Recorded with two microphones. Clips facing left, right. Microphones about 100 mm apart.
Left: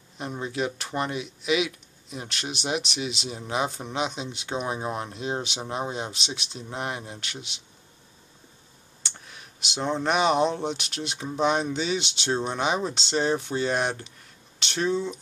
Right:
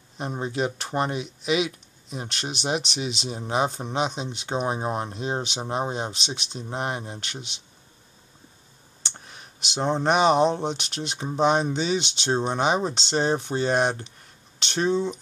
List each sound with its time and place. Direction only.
0.2 s speech: 35° right (ahead or behind)
9.0 s clicking: 35° right (ahead or behind)
9.8 s speech: 30° right (ahead or behind)